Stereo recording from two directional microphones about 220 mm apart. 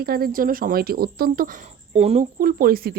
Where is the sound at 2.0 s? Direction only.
30° right (ahead or behind).